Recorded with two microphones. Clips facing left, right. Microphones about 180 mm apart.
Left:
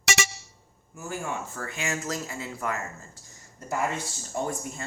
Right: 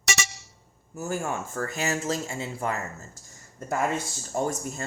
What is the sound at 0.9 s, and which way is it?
Speech, 40° right (ahead or behind).